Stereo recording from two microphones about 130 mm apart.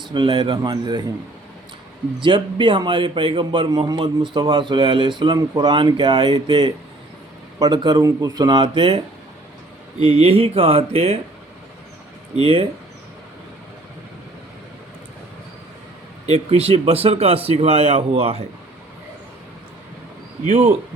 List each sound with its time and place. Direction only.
0.1 s speech: 40° right (ahead or behind)
2.1 s speech: 40° right (ahead or behind)
10.0 s speech: 50° right (ahead or behind)
12.4 s speech: 40° right (ahead or behind)
16.2 s speech: 50° right (ahead or behind)
20.5 s speech: 60° right (ahead or behind)